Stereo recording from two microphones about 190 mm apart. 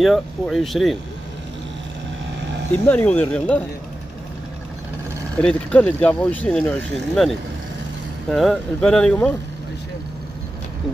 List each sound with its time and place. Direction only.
0.0 s speech: centre (ahead or behind)
2.7 s speech: 10° left (ahead or behind)
5.4 s speech: 5° left (ahead or behind)